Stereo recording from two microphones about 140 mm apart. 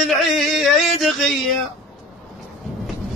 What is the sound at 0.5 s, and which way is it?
Speech, centre (ahead or behind).